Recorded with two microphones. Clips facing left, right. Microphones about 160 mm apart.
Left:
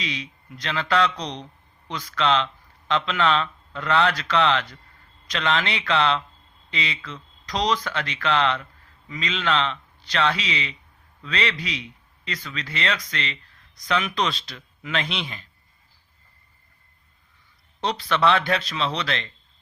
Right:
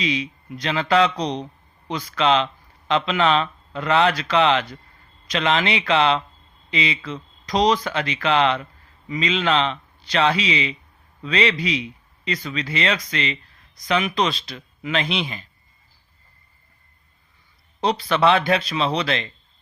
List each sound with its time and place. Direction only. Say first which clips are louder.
0.0 s speech: right 8 dB; 15° right (ahead or behind)
17.7 s speech: right 4 dB; 10° right (ahead or behind)